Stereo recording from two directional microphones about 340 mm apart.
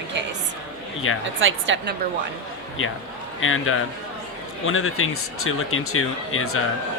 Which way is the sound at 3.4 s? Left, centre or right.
Left.